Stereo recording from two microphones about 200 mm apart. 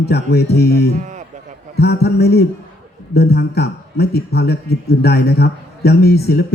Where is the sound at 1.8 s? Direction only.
55° left (ahead or behind).